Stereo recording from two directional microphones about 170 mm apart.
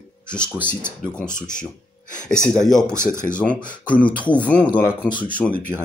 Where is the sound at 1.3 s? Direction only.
50° left (ahead or behind).